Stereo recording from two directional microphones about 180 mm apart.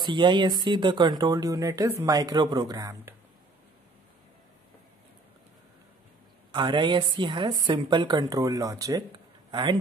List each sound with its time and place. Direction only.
0.0 s speech: 25° right (ahead or behind)
6.5 s speech: 25° right (ahead or behind)